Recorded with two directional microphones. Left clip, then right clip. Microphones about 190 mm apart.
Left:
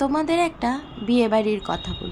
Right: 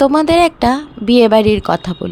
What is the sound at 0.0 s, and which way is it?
Speech, 45° right (ahead or behind).